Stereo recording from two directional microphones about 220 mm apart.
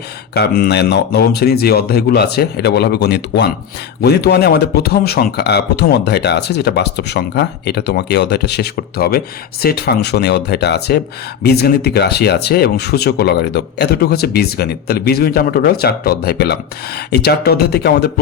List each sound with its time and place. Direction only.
0.3 s speech: 45° left (ahead or behind)